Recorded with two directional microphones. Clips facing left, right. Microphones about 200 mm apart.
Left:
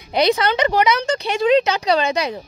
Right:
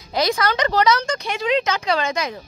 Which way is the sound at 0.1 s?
20° left (ahead or behind).